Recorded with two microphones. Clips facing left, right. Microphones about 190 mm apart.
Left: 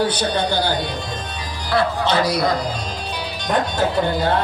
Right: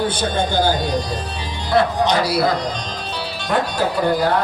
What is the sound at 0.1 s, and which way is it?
Speech, 50° right (ahead or behind).